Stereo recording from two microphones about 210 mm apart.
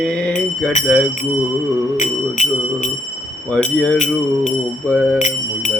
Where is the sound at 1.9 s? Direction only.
35° left (ahead or behind).